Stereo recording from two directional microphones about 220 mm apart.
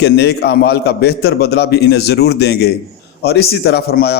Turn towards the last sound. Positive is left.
turn(degrees=45)  # may be behind; listen again after turning